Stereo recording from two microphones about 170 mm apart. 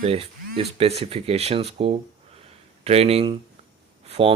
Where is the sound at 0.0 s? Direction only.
35° right (ahead or behind).